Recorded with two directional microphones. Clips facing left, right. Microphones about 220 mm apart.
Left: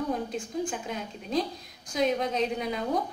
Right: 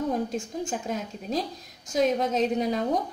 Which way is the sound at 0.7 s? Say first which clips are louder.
Right 3 dB; 40° right (ahead or behind).